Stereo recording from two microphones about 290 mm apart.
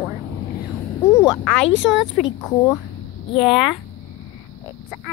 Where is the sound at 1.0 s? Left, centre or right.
Centre.